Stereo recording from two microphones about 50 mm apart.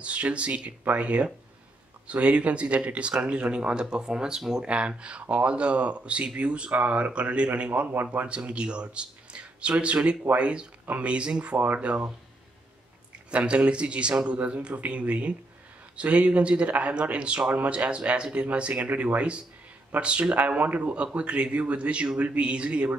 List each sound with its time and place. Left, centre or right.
0.0 s speech: right
4.6 s speech: right
8.3 s speech: right
13.3 s speech: right